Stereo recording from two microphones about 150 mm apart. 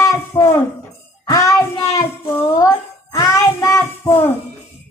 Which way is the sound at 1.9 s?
20° left (ahead or behind).